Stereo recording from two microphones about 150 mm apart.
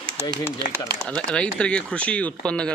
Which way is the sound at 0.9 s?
5° left (ahead or behind).